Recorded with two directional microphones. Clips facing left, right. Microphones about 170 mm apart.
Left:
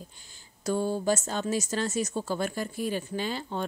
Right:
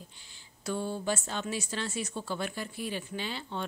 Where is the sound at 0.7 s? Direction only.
40° left (ahead or behind).